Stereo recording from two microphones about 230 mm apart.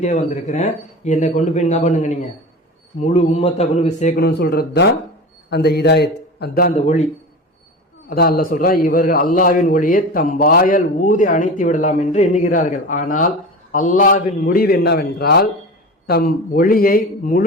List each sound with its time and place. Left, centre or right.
0.0 s a man's voice: left
6.7 s a man's voice: left
8.1 s a man's voice: left